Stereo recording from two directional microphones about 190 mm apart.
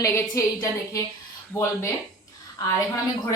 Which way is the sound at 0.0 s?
15° left (ahead or behind).